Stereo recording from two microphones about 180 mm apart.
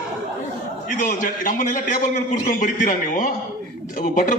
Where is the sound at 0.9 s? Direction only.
45° left (ahead or behind).